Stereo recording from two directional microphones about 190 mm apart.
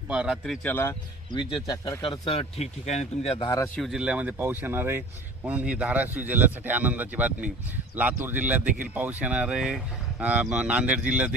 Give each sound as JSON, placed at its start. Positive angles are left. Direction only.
{"t": 0.1, "sound": "speech", "side_deg": -5}
{"t": 0.7, "sound": "speech", "side_deg": 10}
{"t": 3.7, "sound": "speech", "side_deg": 0}